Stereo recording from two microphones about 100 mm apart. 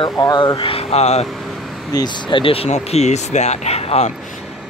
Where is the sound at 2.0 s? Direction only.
50° left (ahead or behind); by 4.0 s 90° left.